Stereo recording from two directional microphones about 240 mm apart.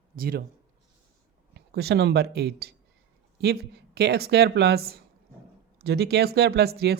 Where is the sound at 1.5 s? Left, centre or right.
Right.